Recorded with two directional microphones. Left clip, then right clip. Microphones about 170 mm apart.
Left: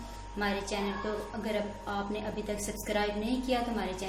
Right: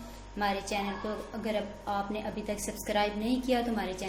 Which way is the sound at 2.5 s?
30° right (ahead or behind).